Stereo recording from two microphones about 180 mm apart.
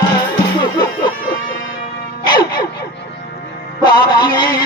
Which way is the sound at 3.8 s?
25° left (ahead or behind).